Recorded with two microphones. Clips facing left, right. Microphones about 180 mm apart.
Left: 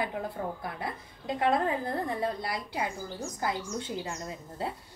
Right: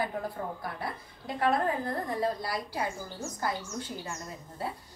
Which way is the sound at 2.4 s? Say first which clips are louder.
Even; 20° left (ahead or behind).